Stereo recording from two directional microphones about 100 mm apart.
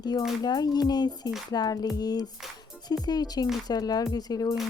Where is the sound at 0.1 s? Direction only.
40° left (ahead or behind).